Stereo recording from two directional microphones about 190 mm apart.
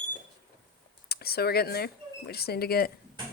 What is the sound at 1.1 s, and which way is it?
Speech, 55° left (ahead or behind).